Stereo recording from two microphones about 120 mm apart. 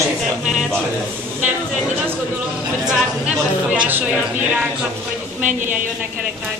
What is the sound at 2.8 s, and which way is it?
Speech, 10° right (ahead or behind).